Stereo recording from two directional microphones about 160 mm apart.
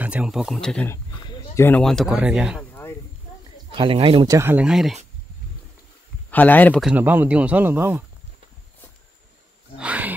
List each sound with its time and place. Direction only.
0.0 s speech: 5° right (ahead or behind)
1.2 s a sound: 15° left (ahead or behind)
1.8 s speech: centre (ahead or behind)
3.7 s speech: 35° right (ahead or behind)
4.3 s speech: 15° right (ahead or behind)
6.3 s speech: 10° left (ahead or behind)
6.8 s speech: 10° right (ahead or behind)
9.8 s speech: 10° right (ahead or behind)